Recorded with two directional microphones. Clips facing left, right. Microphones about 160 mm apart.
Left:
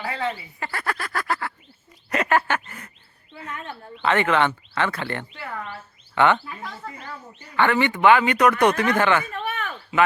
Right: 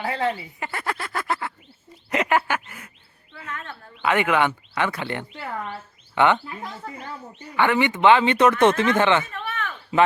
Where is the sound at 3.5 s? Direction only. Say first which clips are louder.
Left 1 dB; 15° left (ahead or behind).